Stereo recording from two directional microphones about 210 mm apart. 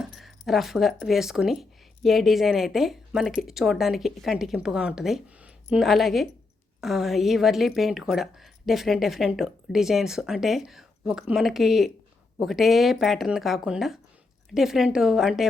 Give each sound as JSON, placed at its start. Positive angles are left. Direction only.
{"t": 0.0, "sound": "a woman's voice", "side_deg": 0}